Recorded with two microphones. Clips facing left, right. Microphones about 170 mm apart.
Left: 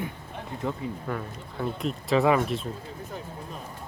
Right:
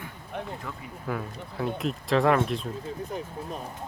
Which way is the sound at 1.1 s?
Centre (ahead or behind).